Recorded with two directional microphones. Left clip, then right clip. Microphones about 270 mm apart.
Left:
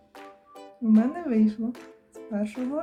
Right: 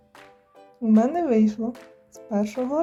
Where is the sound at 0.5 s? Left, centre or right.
Centre.